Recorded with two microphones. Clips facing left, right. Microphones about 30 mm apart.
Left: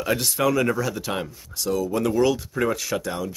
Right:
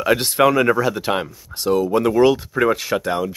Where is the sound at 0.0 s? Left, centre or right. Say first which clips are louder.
Right 7 dB; right.